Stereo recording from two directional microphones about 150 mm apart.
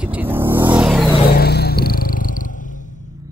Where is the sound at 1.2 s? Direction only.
90° left; by 2.7 s 60° left (ahead or behind).